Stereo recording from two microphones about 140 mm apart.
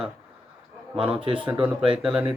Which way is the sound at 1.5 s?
10° right (ahead or behind).